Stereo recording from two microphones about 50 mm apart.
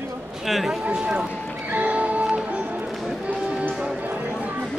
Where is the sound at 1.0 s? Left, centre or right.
Centre.